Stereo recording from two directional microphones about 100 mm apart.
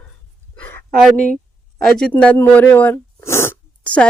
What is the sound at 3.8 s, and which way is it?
Speech, 15° left (ahead or behind).